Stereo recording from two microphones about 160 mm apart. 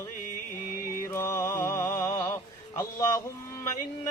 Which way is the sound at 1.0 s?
20° left (ahead or behind).